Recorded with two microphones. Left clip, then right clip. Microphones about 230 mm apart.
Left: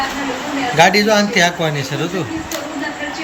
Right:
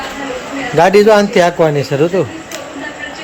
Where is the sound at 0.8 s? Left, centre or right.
Right.